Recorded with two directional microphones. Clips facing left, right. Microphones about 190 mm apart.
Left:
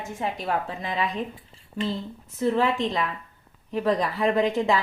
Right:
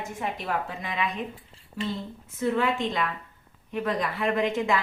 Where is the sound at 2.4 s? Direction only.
35° left (ahead or behind).